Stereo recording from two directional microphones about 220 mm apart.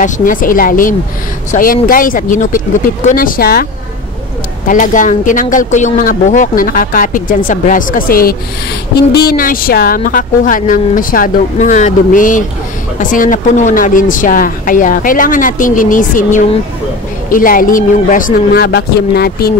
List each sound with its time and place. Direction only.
0.0 s speech: 40° left (ahead or behind)
4.6 s speech: 35° left (ahead or behind)